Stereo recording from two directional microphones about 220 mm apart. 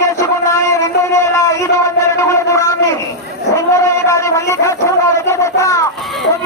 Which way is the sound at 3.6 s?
15° left (ahead or behind).